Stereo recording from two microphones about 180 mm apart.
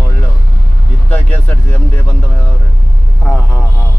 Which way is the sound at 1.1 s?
10° left (ahead or behind).